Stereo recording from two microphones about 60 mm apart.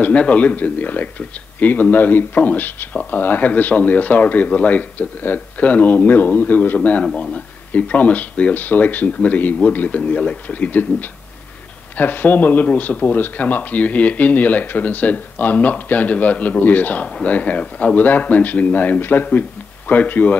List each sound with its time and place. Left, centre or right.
0.0 s speech: left